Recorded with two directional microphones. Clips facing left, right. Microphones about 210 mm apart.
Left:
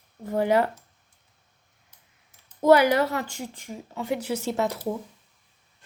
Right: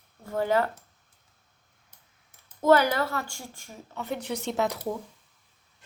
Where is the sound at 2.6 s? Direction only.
15° left (ahead or behind).